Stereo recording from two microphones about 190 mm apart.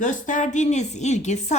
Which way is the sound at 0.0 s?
40° left (ahead or behind).